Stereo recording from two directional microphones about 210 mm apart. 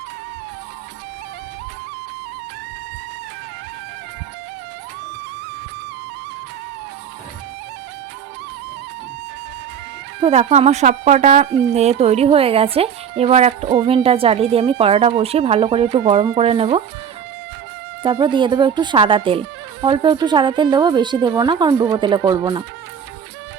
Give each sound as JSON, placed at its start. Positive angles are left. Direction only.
{"t": 10.2, "sound": "speech", "side_deg": -30}
{"t": 18.0, "sound": "speech", "side_deg": -25}